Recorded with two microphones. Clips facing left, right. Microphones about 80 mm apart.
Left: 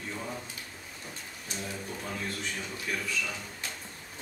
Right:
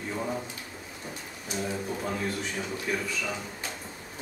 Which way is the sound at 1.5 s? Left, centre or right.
Centre.